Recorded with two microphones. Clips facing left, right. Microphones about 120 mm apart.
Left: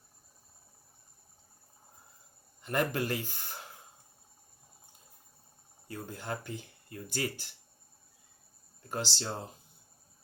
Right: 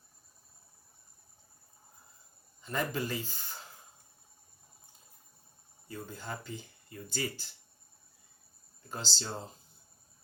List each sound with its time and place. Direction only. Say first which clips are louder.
2.6 s speech: left 3 dB; 65° left (ahead or behind)
5.9 s speech: left 3 dB; 65° left (ahead or behind)
8.9 s speech: left 4 dB; 60° left (ahead or behind)